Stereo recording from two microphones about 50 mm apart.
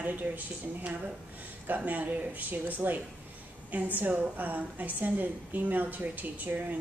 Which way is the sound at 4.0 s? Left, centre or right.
Right.